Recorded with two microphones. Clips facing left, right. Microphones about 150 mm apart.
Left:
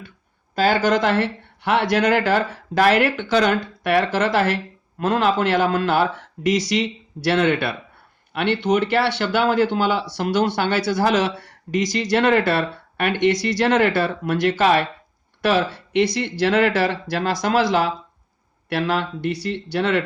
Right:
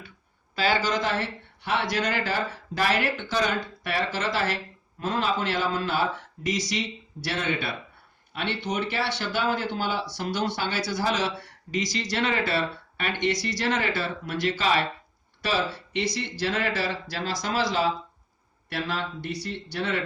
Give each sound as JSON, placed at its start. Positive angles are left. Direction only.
{"t": 0.5, "sound": "speech", "side_deg": 45}
{"t": 18.7, "sound": "speech", "side_deg": 70}